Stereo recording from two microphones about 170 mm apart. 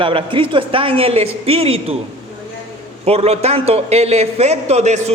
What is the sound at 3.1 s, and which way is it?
A man's voice, 35° right (ahead or behind).